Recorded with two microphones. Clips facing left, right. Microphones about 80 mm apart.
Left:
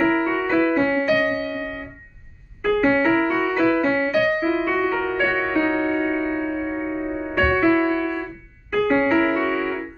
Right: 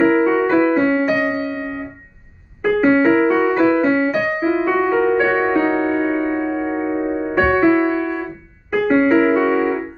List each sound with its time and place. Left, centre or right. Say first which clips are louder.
0.0 s music: right 6 dB; centre
0.9 s keyboard: right 2 dB; centre
2.6 s music: right 4 dB; centre
3.9 s music: right 2 dB; centre